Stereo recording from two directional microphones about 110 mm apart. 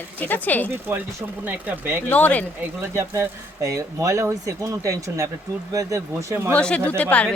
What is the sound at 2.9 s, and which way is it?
Speech, 25° right (ahead or behind).